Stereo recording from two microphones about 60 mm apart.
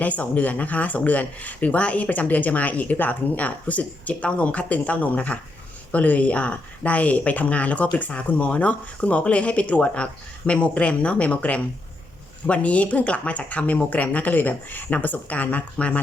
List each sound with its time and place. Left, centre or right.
0.0 s speech: left